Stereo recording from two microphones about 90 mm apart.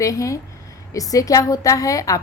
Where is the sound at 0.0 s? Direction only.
40° left (ahead or behind).